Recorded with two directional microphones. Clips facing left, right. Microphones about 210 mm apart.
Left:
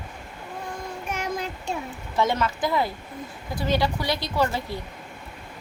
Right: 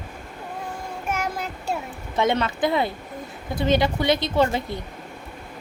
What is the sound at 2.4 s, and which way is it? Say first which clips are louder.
A woman's voice: right 2 dB; 25° right (ahead or behind).